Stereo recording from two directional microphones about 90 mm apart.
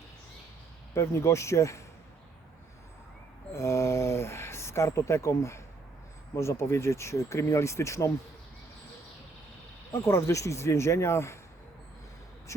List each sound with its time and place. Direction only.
0.9 s speech: 30° left (ahead or behind)
3.5 s a sound: 30° left (ahead or behind)
6.3 s speech: 30° left (ahead or behind)
9.9 s speech: 35° left (ahead or behind)
12.5 s speech: 35° left (ahead or behind)